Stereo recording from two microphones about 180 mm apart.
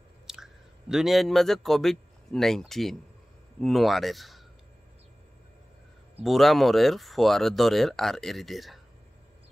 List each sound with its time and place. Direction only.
0.3 s speech: 5° right (ahead or behind)
6.2 s speech: centre (ahead or behind)